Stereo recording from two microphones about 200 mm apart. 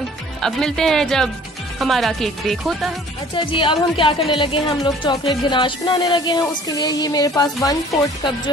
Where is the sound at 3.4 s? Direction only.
25° left (ahead or behind).